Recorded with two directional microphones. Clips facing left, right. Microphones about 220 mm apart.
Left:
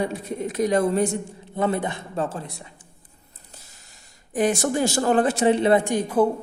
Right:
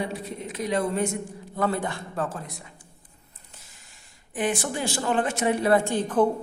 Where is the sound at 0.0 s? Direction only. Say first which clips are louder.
Left 5 dB; 45° left (ahead or behind).